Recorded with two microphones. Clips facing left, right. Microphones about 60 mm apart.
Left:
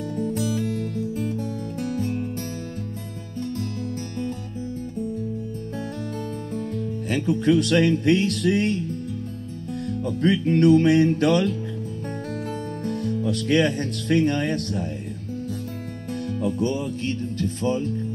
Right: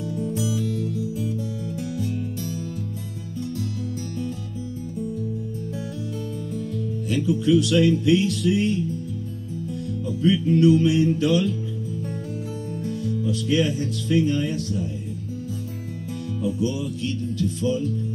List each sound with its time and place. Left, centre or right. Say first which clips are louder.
0.2 s music: left 2 dB; left
7.1 s speech: even; left
10.0 s speech: right 1 dB; left
12.8 s speech: left 1 dB; left
16.4 s speech: even; left